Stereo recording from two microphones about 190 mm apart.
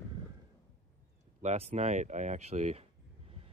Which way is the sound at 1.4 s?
35° right (ahead or behind).